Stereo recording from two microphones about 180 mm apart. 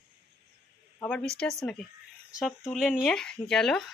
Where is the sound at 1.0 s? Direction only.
10° left (ahead or behind).